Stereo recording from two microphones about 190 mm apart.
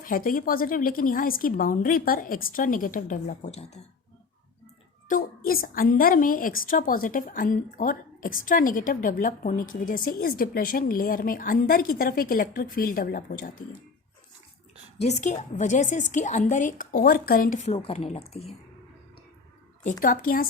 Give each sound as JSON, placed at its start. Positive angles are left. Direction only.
{"t": 0.0, "sound": "a woman's voice", "side_deg": 45}
{"t": 5.0, "sound": "a woman's voice", "side_deg": 45}
{"t": 15.0, "sound": "a woman's voice", "side_deg": 40}
{"t": 19.8, "sound": "a woman's voice", "side_deg": 40}